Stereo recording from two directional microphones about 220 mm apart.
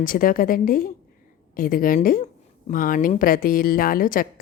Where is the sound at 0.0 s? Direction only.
40° left (ahead or behind).